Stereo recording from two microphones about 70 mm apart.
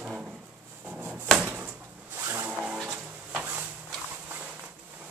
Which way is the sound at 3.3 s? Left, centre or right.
Right.